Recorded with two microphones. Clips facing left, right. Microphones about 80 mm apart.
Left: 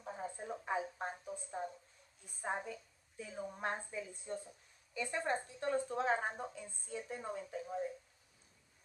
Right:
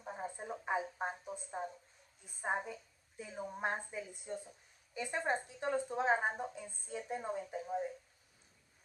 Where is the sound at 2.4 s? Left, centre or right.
Right.